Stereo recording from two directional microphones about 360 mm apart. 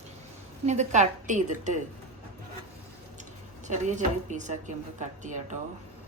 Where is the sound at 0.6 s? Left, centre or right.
Centre.